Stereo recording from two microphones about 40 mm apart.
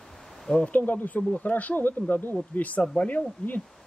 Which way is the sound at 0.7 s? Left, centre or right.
Left.